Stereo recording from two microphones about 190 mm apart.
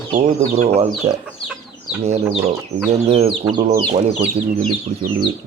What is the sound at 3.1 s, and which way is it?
Speech, 35° right (ahead or behind).